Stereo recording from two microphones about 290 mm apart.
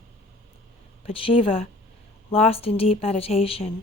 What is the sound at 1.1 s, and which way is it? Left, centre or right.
A woman's voice, centre.